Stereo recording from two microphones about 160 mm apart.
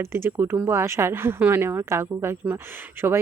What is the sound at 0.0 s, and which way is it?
Speech, 15° right (ahead or behind).